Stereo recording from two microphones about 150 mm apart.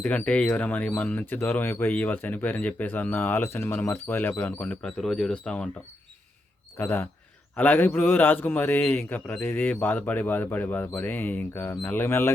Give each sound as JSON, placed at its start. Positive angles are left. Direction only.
{"t": 0.0, "sound": "speech", "side_deg": 10}
{"t": 6.7, "sound": "speech", "side_deg": 15}